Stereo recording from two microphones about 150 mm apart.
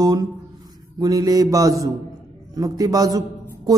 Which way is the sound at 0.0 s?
25° right (ahead or behind).